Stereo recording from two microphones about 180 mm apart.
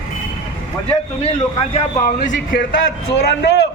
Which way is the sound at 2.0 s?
50° left (ahead or behind).